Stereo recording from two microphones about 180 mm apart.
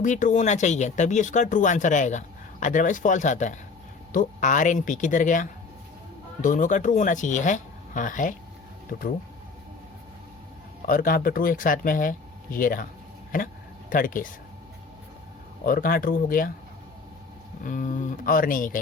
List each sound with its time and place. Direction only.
0.0 s speech: 45° left (ahead or behind)
10.8 s speech: 50° left (ahead or behind)
15.6 s speech: 50° left (ahead or behind)
17.6 s speech: 50° left (ahead or behind)